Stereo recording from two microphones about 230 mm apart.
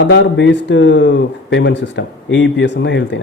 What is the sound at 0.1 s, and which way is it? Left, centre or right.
Speech, left.